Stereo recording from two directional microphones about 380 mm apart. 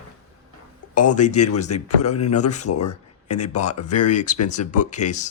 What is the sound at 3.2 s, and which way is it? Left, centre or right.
Speech, left.